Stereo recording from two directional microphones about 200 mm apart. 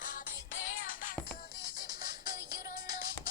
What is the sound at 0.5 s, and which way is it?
Music, 75° left (ahead or behind).